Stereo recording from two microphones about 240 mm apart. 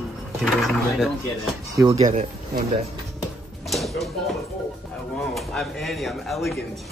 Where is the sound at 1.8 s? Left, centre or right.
Right.